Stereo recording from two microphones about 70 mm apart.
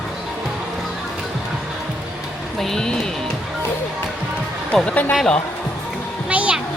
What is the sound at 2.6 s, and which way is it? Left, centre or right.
Speech, centre.